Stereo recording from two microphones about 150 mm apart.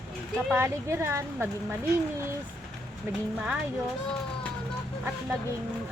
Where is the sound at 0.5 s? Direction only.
15° right (ahead or behind).